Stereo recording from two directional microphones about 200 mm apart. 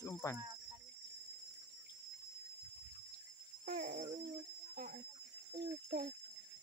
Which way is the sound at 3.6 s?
40° right (ahead or behind).